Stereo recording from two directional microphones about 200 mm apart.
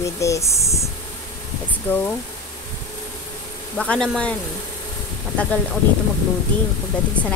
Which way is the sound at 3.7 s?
5° left (ahead or behind).